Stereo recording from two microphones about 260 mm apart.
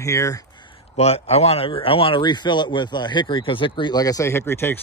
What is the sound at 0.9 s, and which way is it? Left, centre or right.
Speech, left.